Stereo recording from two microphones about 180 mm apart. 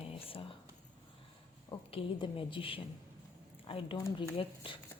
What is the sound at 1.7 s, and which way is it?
A woman's voice, 30° left (ahead or behind).